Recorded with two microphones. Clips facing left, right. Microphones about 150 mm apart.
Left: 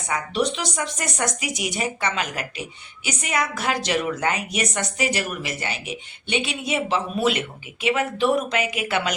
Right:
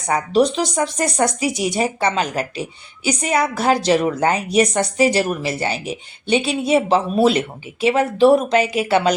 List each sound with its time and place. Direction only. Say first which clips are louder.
0.1 s speech: right 8 dB; 35° right (ahead or behind)